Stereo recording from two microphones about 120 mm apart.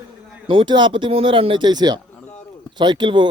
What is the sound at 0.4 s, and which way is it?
Speech, 45° right (ahead or behind).